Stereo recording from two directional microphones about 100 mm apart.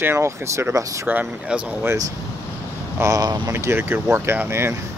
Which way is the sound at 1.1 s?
15° right (ahead or behind).